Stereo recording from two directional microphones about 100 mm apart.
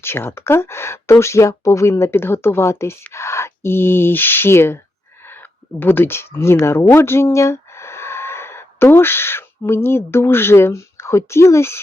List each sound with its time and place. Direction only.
0.0 s speech: 25° left (ahead or behind)
5.8 s speech: 20° left (ahead or behind)